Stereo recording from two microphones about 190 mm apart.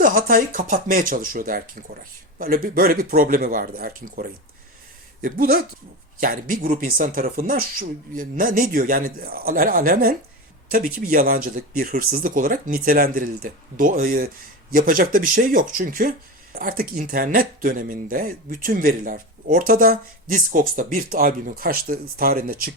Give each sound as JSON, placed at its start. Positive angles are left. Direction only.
{"t": 0.0, "sound": "speech", "side_deg": -45}